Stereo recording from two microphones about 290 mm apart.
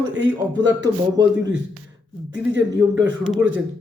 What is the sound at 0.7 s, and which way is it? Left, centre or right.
Speech, centre.